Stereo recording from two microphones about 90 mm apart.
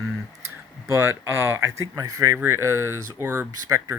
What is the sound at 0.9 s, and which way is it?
Speech, 30° right (ahead or behind).